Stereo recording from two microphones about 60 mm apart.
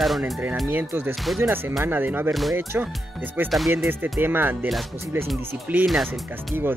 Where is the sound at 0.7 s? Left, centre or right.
Right.